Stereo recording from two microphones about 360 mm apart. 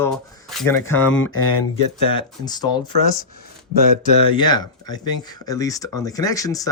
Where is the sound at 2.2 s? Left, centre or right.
Centre.